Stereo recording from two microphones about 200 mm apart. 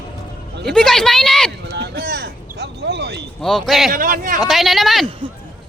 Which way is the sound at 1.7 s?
55° right (ahead or behind).